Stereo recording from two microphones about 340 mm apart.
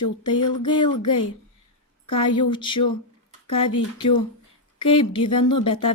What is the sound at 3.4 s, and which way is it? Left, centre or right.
Speech, centre.